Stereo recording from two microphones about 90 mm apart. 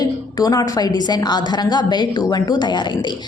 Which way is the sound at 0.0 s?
45° left (ahead or behind).